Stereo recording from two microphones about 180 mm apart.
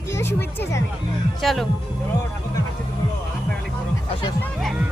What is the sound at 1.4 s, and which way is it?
Speech, centre (ahead or behind).